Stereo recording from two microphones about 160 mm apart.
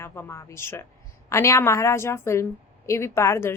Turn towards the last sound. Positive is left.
turn(degrees=15)  # may be behind; listen again after turning